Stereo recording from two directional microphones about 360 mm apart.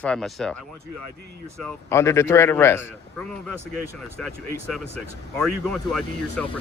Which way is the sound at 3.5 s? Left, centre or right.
Right.